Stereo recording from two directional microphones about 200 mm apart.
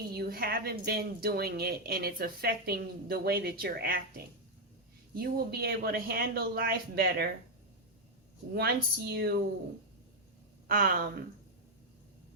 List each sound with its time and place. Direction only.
0.1 s speech: 50° right (ahead or behind)
5.1 s speech: 50° right (ahead or behind)
8.5 s speech: 55° right (ahead or behind)
10.7 s speech: 45° right (ahead or behind)